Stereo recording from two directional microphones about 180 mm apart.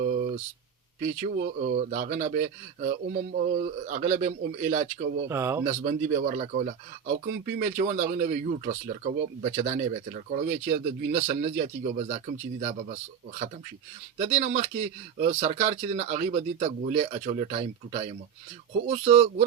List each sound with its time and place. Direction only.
0.0 s a sound: 50° right (ahead or behind)
1.0 s a man's voice: 45° right (ahead or behind)
5.3 s speech: 15° right (ahead or behind)
5.6 s speech: 40° right (ahead or behind)
14.3 s speech: 40° right (ahead or behind)